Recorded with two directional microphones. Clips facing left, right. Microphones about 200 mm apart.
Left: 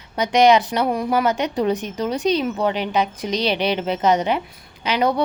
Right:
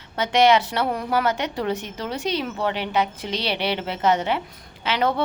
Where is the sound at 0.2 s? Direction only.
15° left (ahead or behind).